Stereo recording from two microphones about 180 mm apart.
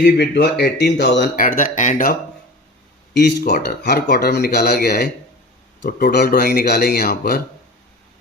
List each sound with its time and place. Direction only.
0.0 s speech: 70° left (ahead or behind)
1.4 s speech: 50° left (ahead or behind)
3.2 s speech: 55° left (ahead or behind)